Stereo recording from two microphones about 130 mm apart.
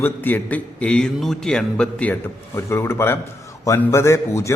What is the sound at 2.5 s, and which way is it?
A man's voice, 20° left (ahead or behind).